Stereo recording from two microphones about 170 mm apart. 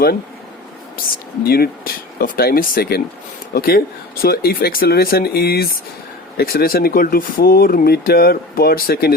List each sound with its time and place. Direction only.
1.5 s speech: 60° left (ahead or behind)